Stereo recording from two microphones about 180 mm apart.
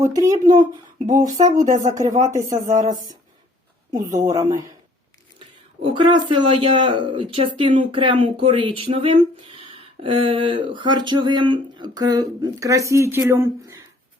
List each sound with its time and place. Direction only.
0.0 s speech: 20° right (ahead or behind)
1.3 s speech: 45° right (ahead or behind)
2.2 s speech: 20° right (ahead or behind)
5.8 s speech: 25° right (ahead or behind)